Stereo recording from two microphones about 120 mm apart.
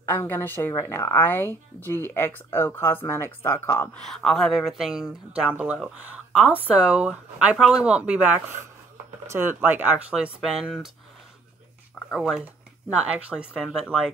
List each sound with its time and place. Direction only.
0.0 s a woman's voice: 20° left (ahead or behind)
4.0 s speech: 5° left (ahead or behind)
12.1 s speech: 5° right (ahead or behind)